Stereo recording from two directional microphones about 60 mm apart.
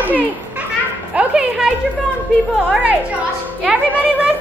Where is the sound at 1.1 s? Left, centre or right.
Centre.